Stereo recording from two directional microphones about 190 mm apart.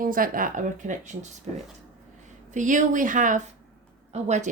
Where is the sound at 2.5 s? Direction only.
40° right (ahead or behind).